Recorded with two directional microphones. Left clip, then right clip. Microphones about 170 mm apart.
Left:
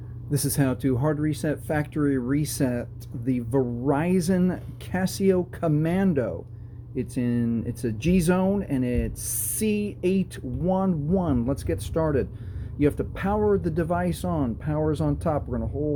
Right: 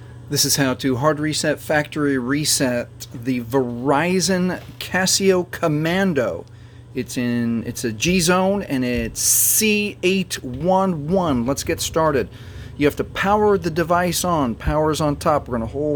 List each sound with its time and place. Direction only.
0.3 s speech: centre (ahead or behind); by 15.7 s 25° right (ahead or behind)